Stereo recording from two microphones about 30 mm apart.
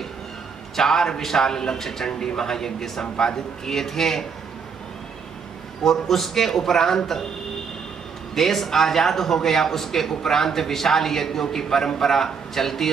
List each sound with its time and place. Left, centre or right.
0.7 s a man's voice: centre
5.9 s a man's voice: centre
8.4 s a man's voice: centre